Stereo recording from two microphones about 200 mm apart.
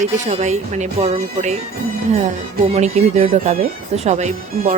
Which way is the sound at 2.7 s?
35° right (ahead or behind).